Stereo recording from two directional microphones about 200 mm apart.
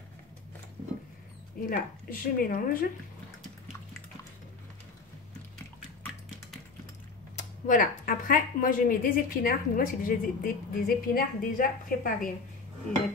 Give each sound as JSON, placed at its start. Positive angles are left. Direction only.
{"t": 1.7, "sound": "speech", "side_deg": 45}
{"t": 7.3, "sound": "speech", "side_deg": 40}